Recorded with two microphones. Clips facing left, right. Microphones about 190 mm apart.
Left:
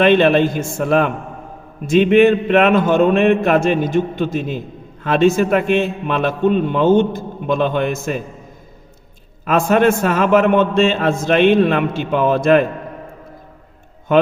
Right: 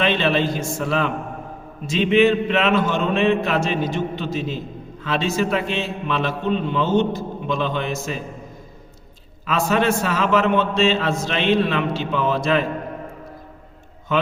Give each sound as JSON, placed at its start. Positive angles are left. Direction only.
{"t": 0.0, "sound": "a man's voice", "side_deg": 55}
{"t": 9.5, "sound": "a man's voice", "side_deg": 50}
{"t": 14.1, "sound": "a man's voice", "side_deg": 55}